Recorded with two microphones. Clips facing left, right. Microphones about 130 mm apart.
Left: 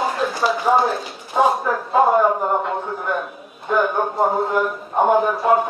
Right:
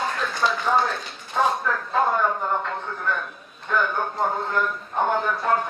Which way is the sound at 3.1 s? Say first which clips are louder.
Left 4 dB; 10° left (ahead or behind).